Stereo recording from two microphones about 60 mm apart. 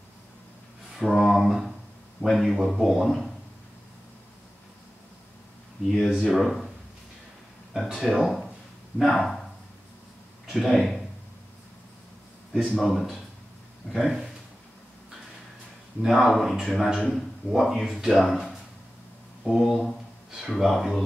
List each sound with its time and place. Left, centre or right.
0.9 s a sound: centre
2.2 s speech: centre
5.9 s speech: centre
7.7 s speech: centre
10.4 s speech: centre
12.7 s speech: centre
16.0 s speech: centre